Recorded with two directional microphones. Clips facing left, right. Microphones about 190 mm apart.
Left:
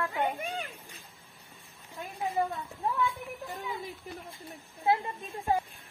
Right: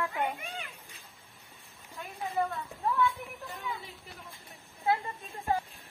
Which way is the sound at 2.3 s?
15° left (ahead or behind).